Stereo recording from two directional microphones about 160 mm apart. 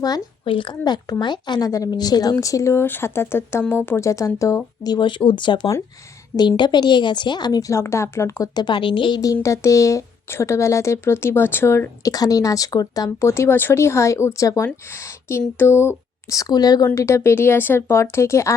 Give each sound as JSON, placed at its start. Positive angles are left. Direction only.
{"t": 0.0, "sound": "a woman's voice", "side_deg": 30}